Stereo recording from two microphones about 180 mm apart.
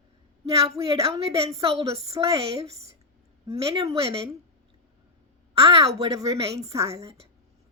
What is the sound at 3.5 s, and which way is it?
Speech, 20° right (ahead or behind).